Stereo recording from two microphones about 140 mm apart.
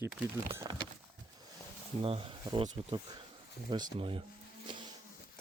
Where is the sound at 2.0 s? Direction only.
40° right (ahead or behind).